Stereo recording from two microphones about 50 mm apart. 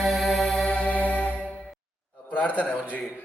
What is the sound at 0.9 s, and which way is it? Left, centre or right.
Music, left.